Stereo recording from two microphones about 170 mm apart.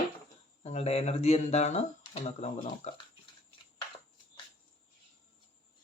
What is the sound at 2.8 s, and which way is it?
Speech, 40° left (ahead or behind).